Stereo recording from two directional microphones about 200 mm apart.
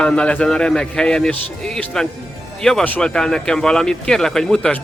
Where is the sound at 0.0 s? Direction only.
5° left (ahead or behind).